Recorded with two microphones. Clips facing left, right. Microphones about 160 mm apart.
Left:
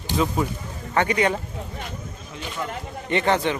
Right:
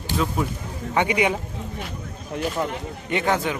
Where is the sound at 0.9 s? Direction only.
10° right (ahead or behind).